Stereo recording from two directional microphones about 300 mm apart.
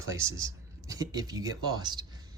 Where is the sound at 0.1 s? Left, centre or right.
Centre.